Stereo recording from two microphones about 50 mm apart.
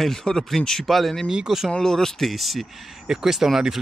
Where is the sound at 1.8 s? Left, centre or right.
Centre.